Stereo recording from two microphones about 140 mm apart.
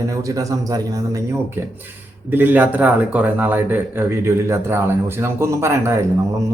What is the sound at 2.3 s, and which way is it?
Speech, 15° right (ahead or behind).